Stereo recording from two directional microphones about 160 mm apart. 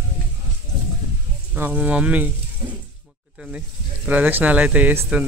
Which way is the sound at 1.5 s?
10° right (ahead or behind).